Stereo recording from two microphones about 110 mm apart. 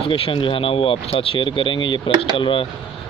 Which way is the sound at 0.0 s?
55° left (ahead or behind).